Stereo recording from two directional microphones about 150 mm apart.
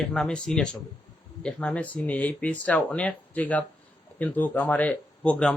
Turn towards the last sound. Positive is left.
turn(degrees=5)  # may be behind; listen again after turning